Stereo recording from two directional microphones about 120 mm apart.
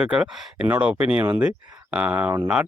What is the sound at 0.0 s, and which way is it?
Speech, 5° right (ahead or behind).